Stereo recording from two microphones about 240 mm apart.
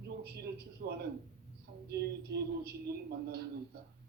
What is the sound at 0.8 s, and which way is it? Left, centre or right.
A man's voice, right.